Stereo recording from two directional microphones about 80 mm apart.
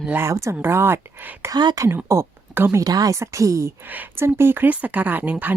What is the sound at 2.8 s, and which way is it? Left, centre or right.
Speech, right.